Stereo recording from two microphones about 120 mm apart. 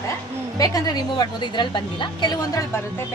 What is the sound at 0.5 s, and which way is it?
A woman's voice, 30° left (ahead or behind).